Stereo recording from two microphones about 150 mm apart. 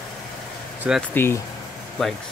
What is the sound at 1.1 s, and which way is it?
Speech, 15° left (ahead or behind).